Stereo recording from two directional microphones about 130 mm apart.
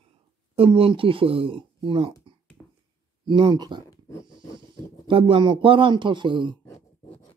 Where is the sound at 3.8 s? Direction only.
25° left (ahead or behind).